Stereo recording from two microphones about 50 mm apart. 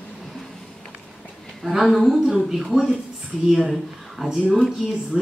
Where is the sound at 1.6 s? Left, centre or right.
Centre.